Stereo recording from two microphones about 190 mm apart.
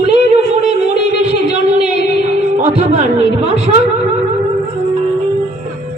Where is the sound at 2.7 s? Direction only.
35° right (ahead or behind).